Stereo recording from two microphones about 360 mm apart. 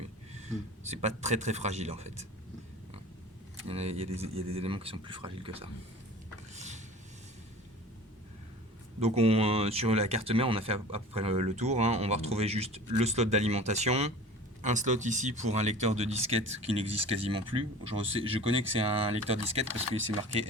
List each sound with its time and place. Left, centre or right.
0.9 s speech: centre
3.7 s speech: centre
6.5 s a sound: centre
9.0 s speech: centre